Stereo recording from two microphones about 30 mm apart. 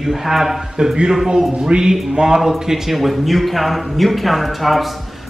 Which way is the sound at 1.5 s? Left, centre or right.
Right.